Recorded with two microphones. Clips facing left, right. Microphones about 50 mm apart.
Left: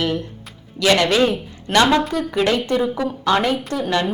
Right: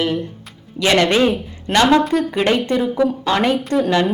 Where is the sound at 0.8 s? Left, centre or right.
Right.